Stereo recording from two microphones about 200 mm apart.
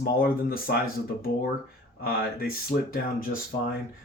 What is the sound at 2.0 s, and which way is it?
Speech, 45° left (ahead or behind).